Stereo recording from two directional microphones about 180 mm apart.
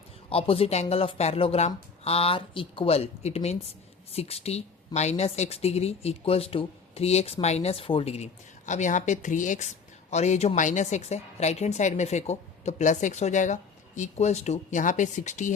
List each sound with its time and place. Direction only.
0.3 s speech: 30° left (ahead or behind)